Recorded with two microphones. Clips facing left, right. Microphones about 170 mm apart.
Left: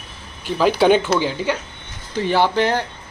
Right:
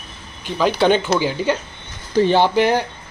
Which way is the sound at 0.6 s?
5° left (ahead or behind).